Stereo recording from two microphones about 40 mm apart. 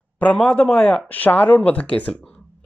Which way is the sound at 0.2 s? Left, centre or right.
Left.